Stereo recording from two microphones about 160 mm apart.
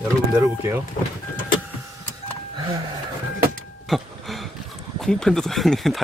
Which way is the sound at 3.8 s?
Centre (ahead or behind).